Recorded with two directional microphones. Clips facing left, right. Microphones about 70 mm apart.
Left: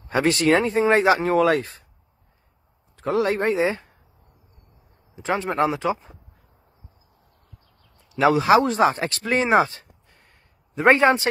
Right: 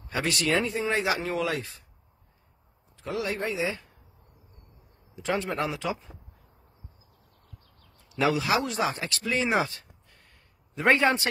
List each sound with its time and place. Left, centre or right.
0.1 s a man's voice: left
3.0 s speech: left
5.1 s speech: left
8.1 s a man's voice: left